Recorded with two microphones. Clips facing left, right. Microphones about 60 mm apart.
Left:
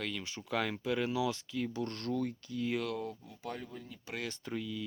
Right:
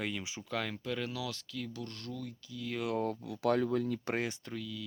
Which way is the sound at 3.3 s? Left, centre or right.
Right.